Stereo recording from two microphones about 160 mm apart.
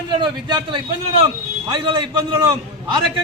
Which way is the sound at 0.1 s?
30° right (ahead or behind).